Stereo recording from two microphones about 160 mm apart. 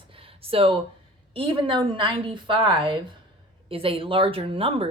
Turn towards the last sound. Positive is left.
turn(degrees=-35)  # may be behind; listen again after turning